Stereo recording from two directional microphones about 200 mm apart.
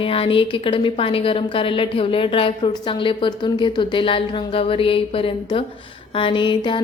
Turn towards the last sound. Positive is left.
turn(degrees=25)  # may be behind; listen again after turning